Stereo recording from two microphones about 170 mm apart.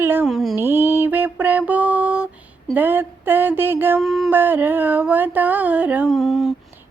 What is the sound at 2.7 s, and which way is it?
Female singing, 10° right (ahead or behind).